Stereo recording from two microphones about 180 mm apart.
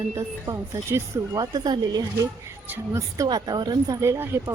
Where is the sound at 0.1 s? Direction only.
15° right (ahead or behind).